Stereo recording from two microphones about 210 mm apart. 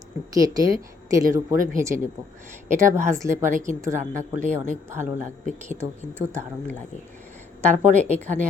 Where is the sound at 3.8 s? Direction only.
15° right (ahead or behind).